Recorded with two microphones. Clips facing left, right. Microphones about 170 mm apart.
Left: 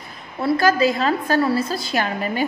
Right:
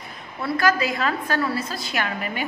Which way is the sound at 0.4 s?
30° left (ahead or behind).